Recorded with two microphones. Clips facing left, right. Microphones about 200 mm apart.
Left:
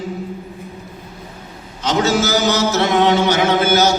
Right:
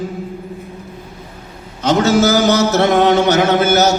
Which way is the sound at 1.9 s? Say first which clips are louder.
Right 4 dB; 55° right (ahead or behind).